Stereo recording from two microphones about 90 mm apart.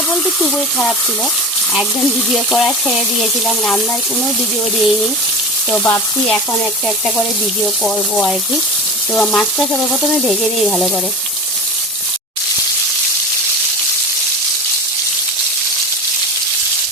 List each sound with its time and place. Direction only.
0.1 s speech: 10° left (ahead or behind)
4.8 s speech: centre (ahead or behind)
5.7 s stir: 25° left (ahead or behind)
7.9 s speech: 5° left (ahead or behind)